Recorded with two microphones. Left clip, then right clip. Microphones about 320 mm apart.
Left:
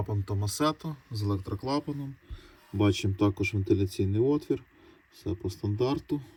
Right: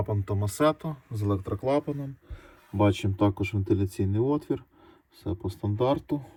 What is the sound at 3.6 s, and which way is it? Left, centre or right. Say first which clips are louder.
Speech: right 1 dB; centre.